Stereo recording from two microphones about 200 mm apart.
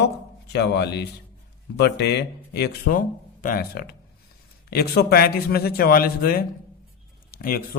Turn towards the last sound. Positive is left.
turn(degrees=45)  # may be behind; listen again after turning